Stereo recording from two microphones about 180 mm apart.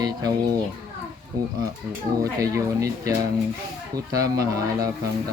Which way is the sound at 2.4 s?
20° right (ahead or behind).